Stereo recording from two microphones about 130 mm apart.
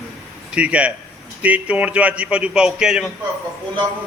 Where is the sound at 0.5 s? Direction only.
10° right (ahead or behind).